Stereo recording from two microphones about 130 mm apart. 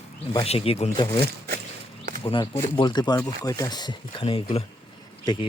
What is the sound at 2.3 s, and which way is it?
Speech, 35° left (ahead or behind).